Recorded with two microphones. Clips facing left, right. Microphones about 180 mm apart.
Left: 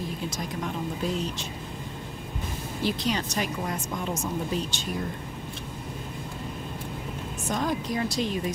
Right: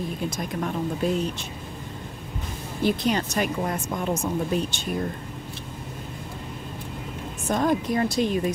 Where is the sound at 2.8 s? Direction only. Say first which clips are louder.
Right 5 dB; 55° right (ahead or behind).